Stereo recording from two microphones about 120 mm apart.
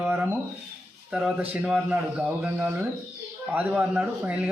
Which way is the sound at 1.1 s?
5° right (ahead or behind).